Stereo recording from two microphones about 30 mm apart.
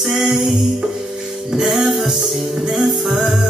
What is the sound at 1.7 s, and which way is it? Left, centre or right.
Music, centre.